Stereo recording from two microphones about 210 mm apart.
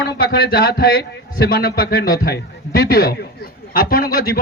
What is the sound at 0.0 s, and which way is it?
A man's voice, 45° left (ahead or behind).